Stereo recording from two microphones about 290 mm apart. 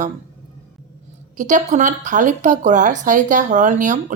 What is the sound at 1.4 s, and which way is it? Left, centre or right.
A woman's voice, right.